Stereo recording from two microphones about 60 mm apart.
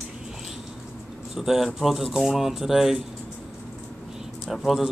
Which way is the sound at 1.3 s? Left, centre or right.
Centre.